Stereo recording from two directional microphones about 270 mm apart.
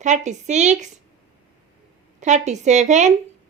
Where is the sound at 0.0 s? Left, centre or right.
Right.